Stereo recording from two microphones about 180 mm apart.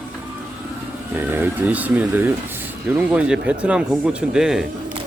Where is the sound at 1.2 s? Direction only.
10° right (ahead or behind).